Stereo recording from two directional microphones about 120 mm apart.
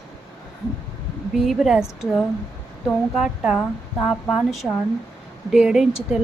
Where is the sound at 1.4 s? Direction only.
Centre (ahead or behind).